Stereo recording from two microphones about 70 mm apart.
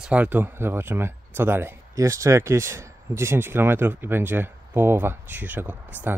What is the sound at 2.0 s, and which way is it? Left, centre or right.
Speech, right.